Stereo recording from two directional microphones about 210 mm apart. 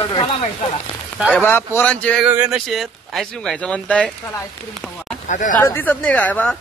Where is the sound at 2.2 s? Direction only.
5° right (ahead or behind).